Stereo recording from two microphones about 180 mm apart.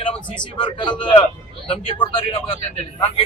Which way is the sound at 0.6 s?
25° left (ahead or behind).